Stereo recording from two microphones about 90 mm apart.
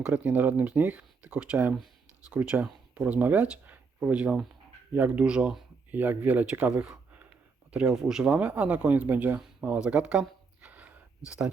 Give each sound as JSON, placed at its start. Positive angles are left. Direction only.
{"t": 0.1, "sound": "speech", "side_deg": -20}
{"t": 5.9, "sound": "speech", "side_deg": -20}
{"t": 10.6, "sound": "a sound", "side_deg": -15}